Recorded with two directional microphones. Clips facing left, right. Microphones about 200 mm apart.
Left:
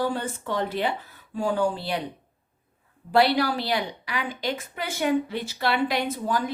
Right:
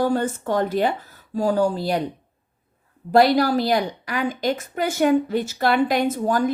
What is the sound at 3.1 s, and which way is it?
A woman's voice, 40° right (ahead or behind).